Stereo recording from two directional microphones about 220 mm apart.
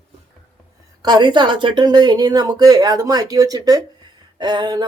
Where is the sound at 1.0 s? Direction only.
20° right (ahead or behind).